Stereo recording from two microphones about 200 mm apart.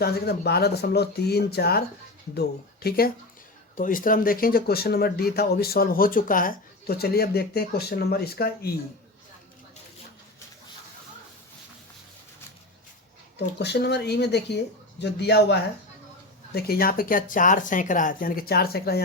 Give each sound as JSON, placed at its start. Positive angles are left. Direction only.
{"t": 0.0, "sound": "speech", "side_deg": 55}
{"t": 13.6, "sound": "speech", "side_deg": 55}